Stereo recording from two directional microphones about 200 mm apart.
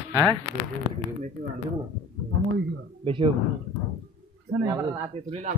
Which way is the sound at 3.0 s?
25° right (ahead or behind).